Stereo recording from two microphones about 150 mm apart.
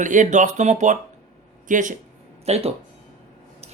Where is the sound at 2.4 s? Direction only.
45° right (ahead or behind).